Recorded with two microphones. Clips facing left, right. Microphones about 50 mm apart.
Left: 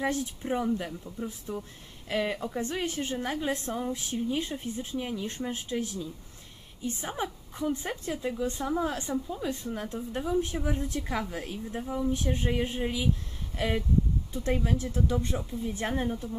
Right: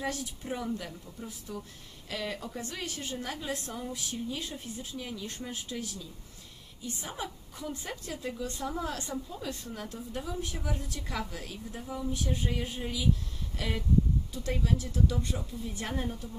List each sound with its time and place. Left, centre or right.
0.0 s a woman's voice: left
12.1 s a woman's voice: left